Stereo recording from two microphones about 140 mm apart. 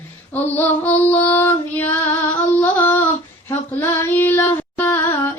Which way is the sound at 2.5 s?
15° left (ahead or behind).